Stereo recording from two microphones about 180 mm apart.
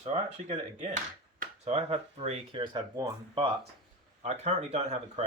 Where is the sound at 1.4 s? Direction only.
35° right (ahead or behind).